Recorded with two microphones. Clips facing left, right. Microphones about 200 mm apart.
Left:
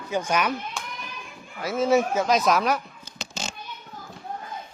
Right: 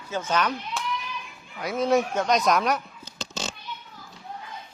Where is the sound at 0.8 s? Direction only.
Centre (ahead or behind).